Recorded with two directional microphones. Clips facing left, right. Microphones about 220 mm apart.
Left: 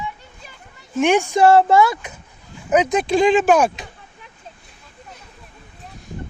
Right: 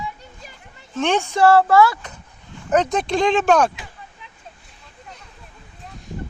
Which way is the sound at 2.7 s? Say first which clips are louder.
Left 2 dB; centre (ahead or behind).